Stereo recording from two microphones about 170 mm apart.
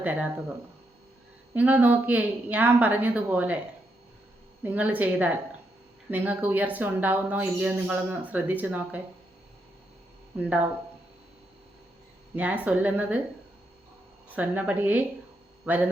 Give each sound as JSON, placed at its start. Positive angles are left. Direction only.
{"t": 0.0, "sound": "speech", "side_deg": -10}
{"t": 1.5, "sound": "speech", "side_deg": -10}
{"t": 4.6, "sound": "speech", "side_deg": -10}
{"t": 10.3, "sound": "speech", "side_deg": -10}
{"t": 12.4, "sound": "speech", "side_deg": -10}
{"t": 14.3, "sound": "speech", "side_deg": -10}